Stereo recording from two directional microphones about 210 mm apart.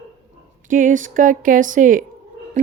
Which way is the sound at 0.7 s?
40° right (ahead or behind).